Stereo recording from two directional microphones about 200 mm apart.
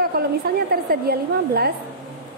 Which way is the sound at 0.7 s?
50° right (ahead or behind).